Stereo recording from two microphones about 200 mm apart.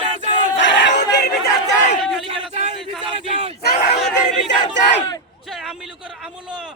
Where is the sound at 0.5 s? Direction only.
65° left (ahead or behind).